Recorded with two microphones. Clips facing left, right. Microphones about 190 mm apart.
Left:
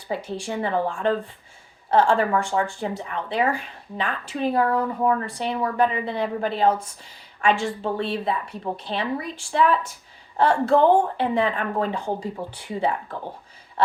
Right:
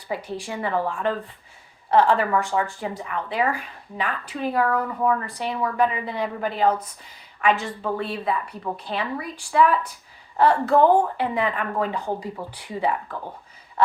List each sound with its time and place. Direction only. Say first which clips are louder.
0.1 s speech: left 2 dB; 25° left (ahead or behind)